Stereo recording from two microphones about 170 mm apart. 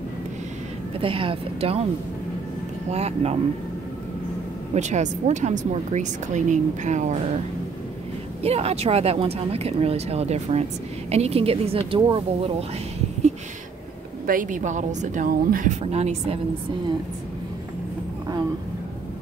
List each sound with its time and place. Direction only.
1.0 s speech: 30° right (ahead or behind)
2.9 s speech: 40° right (ahead or behind)
4.7 s speech: 45° right (ahead or behind)
8.4 s speech: 35° right (ahead or behind)
14.2 s speech: 50° right (ahead or behind)